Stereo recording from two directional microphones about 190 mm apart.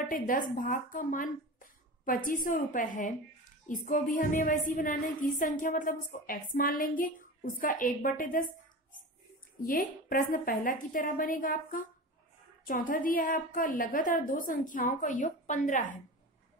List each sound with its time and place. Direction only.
0.0 s a woman's voice: 45° left (ahead or behind)
9.7 s a woman's voice: 45° left (ahead or behind)